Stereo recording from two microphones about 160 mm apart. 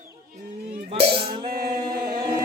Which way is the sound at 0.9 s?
35° right (ahead or behind).